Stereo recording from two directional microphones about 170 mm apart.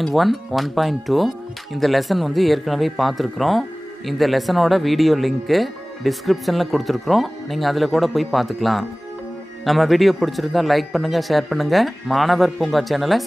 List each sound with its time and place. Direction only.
0.0 s speech: centre (ahead or behind)